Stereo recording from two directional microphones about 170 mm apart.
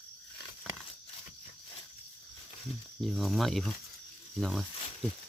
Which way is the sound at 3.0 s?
Centre (ahead or behind).